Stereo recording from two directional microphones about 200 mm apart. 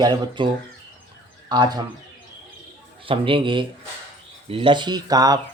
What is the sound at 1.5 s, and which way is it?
Speech, 20° right (ahead or behind).